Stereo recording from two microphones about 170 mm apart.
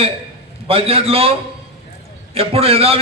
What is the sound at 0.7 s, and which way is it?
Speech, 35° right (ahead or behind).